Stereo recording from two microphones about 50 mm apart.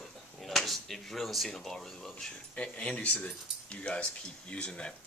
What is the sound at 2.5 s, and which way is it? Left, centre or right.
Speech, left.